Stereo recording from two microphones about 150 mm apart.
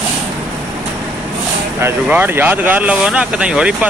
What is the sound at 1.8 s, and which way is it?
Speech, 15° right (ahead or behind).